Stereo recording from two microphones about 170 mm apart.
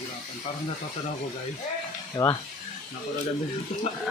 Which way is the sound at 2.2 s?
20° left (ahead or behind).